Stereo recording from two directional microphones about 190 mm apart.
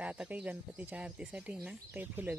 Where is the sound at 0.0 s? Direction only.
5° right (ahead or behind).